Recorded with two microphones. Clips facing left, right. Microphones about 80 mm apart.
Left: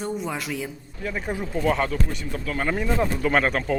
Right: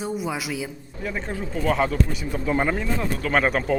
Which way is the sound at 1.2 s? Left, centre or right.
Centre.